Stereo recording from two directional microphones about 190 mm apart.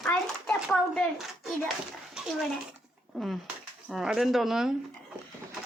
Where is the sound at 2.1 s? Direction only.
5° right (ahead or behind).